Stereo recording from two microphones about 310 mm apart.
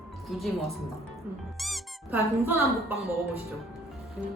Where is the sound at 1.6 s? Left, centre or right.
Centre.